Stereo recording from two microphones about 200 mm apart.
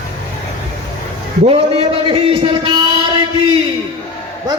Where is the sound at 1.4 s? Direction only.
30° right (ahead or behind).